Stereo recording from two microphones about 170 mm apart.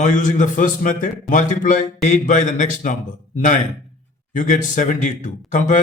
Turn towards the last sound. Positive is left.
turn(degrees=50)  # may be behind; listen again after turning